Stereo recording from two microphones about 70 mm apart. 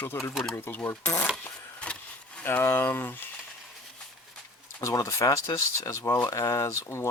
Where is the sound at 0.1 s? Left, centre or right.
Left.